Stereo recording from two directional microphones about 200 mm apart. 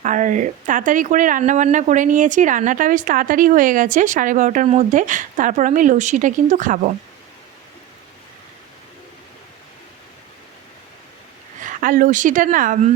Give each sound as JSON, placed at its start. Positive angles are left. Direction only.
{"t": 0.0, "sound": "speech", "side_deg": -40}
{"t": 11.6, "sound": "a woman's voice", "side_deg": -40}